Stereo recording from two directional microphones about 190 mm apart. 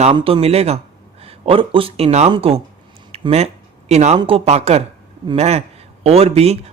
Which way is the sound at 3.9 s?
35° right (ahead or behind).